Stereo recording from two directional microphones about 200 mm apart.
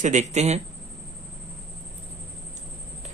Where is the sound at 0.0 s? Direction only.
35° right (ahead or behind).